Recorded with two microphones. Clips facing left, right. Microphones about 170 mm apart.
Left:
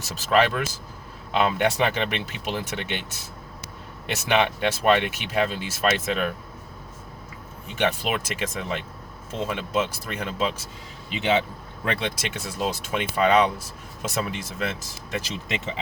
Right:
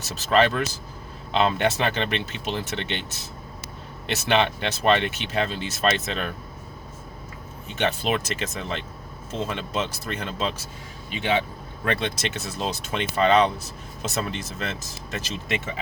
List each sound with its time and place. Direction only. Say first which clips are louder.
0.0 s speech: right 1 dB; 10° left (ahead or behind)
7.8 s speech: even; 10° left (ahead or behind)
11.9 s speech: right 1 dB; 10° left (ahead or behind)